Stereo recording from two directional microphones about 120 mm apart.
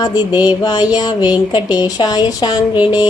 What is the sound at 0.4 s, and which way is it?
A woman's voice, 35° left (ahead or behind).